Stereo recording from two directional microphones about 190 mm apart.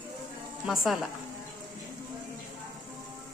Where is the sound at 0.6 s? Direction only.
Centre (ahead or behind).